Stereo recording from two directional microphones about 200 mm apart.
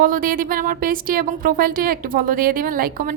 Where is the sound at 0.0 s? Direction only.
45° right (ahead or behind).